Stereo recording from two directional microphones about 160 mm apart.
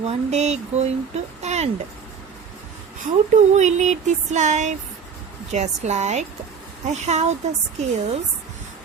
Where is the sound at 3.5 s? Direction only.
45° right (ahead or behind).